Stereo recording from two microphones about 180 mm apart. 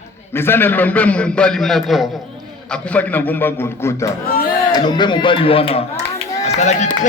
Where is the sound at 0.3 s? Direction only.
10° left (ahead or behind).